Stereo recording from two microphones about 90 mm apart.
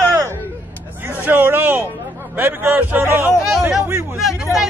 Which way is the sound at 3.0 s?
30° right (ahead or behind).